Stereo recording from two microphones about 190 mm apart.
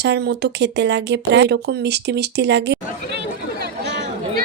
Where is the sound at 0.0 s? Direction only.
60° right (ahead or behind).